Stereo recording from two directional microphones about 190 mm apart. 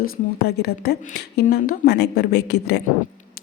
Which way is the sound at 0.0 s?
60° left (ahead or behind).